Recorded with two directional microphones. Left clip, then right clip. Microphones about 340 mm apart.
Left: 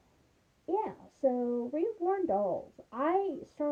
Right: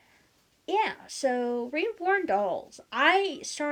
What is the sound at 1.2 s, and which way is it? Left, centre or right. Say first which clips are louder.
Speech: right 3 dB; right.